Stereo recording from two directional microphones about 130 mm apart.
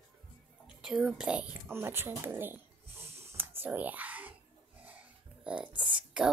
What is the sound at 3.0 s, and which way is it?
Whispering, 15° right (ahead or behind).